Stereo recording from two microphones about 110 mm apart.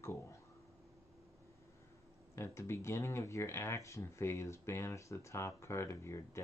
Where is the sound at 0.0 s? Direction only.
25° left (ahead or behind).